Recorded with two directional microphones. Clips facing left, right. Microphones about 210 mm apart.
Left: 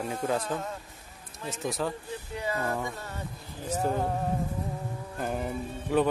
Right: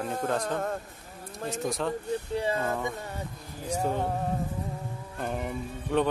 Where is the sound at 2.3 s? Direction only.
30° right (ahead or behind).